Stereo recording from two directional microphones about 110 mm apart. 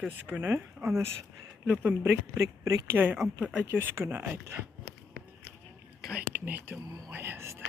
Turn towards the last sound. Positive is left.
turn(degrees=-25)  # may be behind; listen again after turning